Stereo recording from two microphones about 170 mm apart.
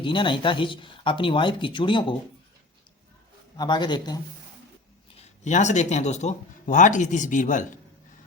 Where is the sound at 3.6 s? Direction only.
25° left (ahead or behind).